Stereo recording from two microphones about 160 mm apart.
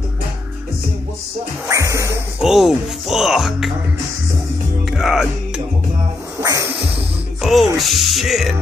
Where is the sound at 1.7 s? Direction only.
20° right (ahead or behind).